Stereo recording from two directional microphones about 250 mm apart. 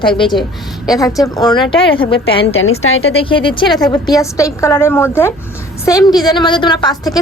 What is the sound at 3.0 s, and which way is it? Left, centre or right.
A woman's voice, left.